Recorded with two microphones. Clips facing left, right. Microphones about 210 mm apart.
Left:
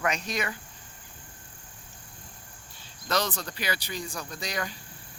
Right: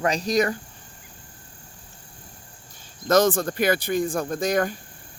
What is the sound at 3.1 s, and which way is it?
Speech, 50° right (ahead or behind).